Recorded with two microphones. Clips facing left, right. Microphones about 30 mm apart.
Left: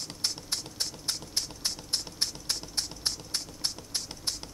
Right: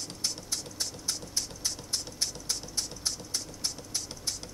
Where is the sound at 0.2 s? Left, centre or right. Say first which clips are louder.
Left 2 dB; left.